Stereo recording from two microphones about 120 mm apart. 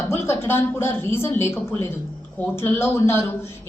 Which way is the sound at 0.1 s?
20° left (ahead or behind).